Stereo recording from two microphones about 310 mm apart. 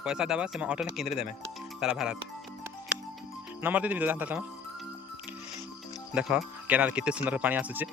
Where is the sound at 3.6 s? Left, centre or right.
Centre.